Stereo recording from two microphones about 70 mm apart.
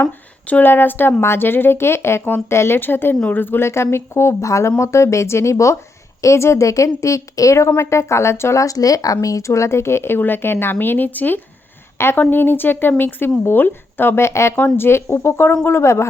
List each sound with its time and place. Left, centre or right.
0.4 s a woman's voice: left
14.3 s speech: left